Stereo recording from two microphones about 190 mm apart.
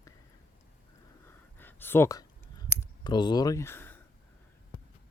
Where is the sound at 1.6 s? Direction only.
10° left (ahead or behind).